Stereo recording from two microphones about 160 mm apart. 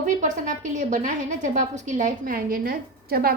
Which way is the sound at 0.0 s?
50° right (ahead or behind).